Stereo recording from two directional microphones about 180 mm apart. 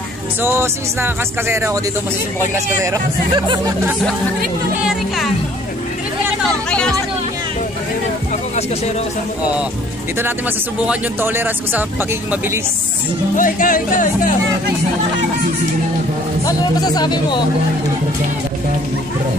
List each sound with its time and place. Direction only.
0.4 s speech: 15° right (ahead or behind)
3.3 s speech: 25° right (ahead or behind)
4.8 s speech: centre (ahead or behind)
6.7 s speech: 5° left (ahead or behind)
10.9 s speech: 10° right (ahead or behind)
13.4 s speech: 50° left (ahead or behind)
16.4 s speech: 20° left (ahead or behind)